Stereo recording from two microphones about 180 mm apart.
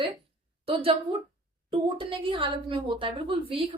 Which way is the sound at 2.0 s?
30° right (ahead or behind).